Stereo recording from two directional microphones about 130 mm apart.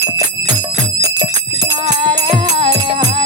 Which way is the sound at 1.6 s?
35° right (ahead or behind).